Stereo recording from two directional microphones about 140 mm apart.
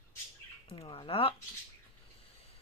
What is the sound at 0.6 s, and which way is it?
Speech, 40° left (ahead or behind).